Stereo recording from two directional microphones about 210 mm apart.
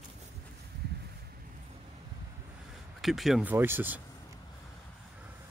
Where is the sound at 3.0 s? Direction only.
Centre (ahead or behind).